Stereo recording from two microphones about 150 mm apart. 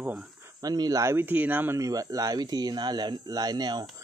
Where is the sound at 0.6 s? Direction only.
25° right (ahead or behind).